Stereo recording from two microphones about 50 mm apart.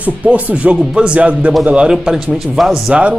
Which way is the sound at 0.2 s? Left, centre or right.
Right.